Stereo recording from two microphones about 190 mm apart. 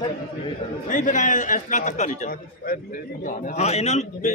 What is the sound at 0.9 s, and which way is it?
A man's voice, 40° left (ahead or behind).